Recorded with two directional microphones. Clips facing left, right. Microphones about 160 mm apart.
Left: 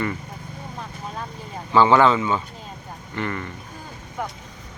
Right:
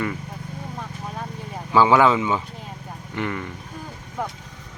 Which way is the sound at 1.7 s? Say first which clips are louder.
Even; 10° right (ahead or behind).